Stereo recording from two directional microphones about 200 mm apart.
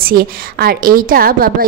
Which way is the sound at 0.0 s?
50° right (ahead or behind).